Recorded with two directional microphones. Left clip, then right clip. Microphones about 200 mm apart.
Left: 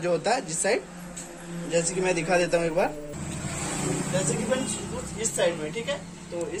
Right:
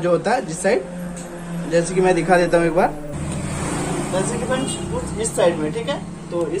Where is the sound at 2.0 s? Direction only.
Centre (ahead or behind).